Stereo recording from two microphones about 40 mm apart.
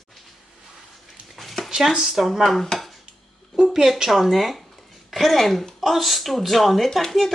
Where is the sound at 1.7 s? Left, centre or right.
Centre.